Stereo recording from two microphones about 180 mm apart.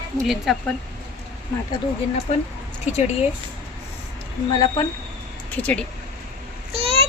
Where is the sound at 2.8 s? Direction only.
40° left (ahead or behind).